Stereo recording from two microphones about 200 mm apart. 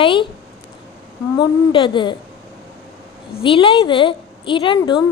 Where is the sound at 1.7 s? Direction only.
25° left (ahead or behind).